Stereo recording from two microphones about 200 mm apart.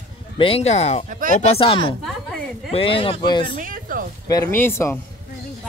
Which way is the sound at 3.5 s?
40° right (ahead or behind).